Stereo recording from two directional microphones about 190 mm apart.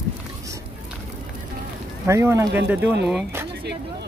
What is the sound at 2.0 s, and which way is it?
Speech, 15° right (ahead or behind).